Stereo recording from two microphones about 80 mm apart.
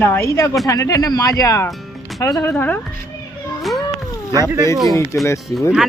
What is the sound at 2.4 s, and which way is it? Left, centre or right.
Speech, left.